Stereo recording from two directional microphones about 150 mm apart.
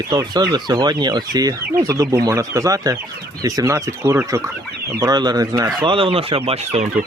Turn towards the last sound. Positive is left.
turn(degrees=-40)  # may be behind; listen again after turning